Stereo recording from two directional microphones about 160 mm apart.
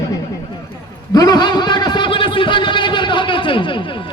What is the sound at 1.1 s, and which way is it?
Speech, 25° left (ahead or behind).